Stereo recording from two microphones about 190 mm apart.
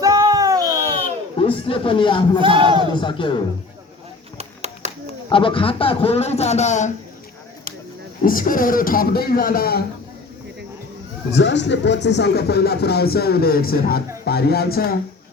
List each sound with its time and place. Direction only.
0.0 s a sound: 15° right (ahead or behind)
1.4 s speech: 30° left (ahead or behind)
2.4 s speech: 25° right (ahead or behind)
2.9 s speech: 25° left (ahead or behind)
4.4 s a sound: 35° right (ahead or behind)
5.3 s a man's voice: 25° left (ahead or behind)
8.2 s a man's voice: 45° left (ahead or behind)
11.3 s speech: 70° left (ahead or behind); by 14.9 s 50° left (ahead or behind)